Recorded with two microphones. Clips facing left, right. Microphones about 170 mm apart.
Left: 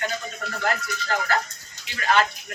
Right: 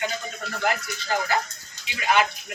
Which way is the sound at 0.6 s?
15° right (ahead or behind).